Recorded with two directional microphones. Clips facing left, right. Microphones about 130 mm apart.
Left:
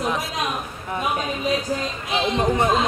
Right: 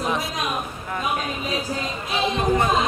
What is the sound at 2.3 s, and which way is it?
Speech, 20° left (ahead or behind).